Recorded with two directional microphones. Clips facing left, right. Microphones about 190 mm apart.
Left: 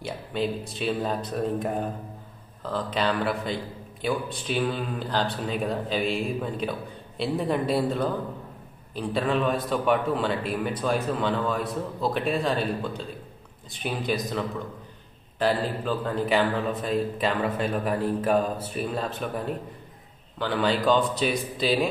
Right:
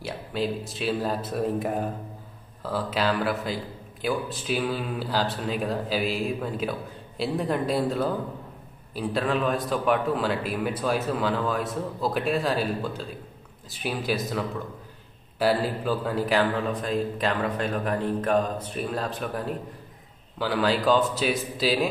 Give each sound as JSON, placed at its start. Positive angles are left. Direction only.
{"t": 0.0, "sound": "a man's voice", "side_deg": 0}